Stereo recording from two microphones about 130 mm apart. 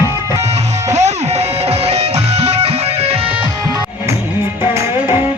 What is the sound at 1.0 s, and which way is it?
Music, 55° right (ahead or behind).